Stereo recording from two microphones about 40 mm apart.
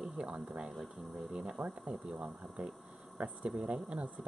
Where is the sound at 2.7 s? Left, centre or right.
Right.